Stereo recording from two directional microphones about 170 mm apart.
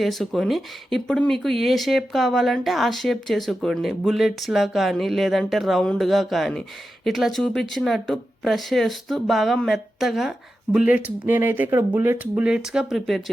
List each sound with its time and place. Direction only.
0.0 s speech: centre (ahead or behind)